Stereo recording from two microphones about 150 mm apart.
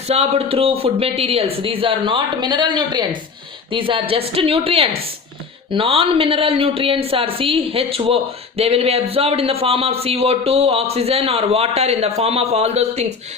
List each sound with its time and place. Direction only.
0.1 s a woman's voice: 40° right (ahead or behind)